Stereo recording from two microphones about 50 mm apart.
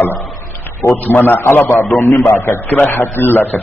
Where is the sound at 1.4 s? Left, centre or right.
Left.